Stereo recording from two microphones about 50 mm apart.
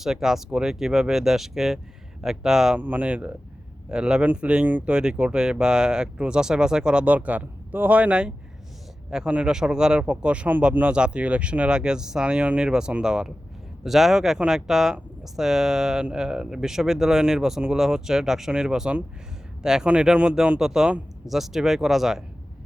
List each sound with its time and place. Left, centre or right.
0.0 s speech: centre
2.7 s speech: right
3.8 s speech: centre
7.0 s speech: right; by 22.2 s centre